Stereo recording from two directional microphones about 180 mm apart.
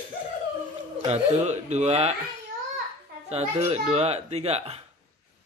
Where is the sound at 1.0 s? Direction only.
40° right (ahead or behind).